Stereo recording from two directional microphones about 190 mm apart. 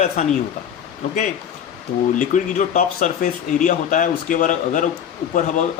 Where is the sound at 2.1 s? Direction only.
40° left (ahead or behind).